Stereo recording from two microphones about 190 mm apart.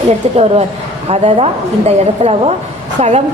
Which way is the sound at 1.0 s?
30° right (ahead or behind).